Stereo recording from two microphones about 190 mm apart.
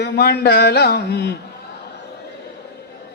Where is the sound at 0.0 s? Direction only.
55° left (ahead or behind).